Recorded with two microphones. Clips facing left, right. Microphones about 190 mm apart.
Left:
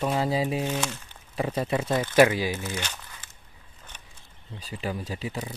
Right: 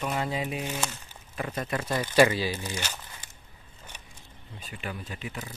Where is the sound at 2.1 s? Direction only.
15° left (ahead or behind).